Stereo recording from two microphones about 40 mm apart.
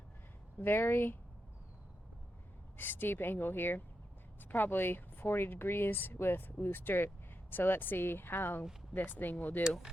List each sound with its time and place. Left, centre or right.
0.6 s speech: left
2.7 s speech: left
9.0 s speech: left